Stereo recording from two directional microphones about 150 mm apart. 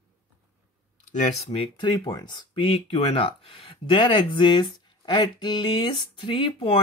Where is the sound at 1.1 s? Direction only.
50° left (ahead or behind).